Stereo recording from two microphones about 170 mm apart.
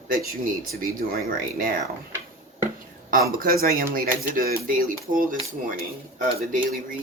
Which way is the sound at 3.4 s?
60° right (ahead or behind).